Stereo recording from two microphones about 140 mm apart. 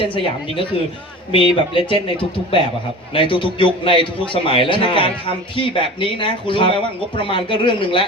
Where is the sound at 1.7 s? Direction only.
40° left (ahead or behind).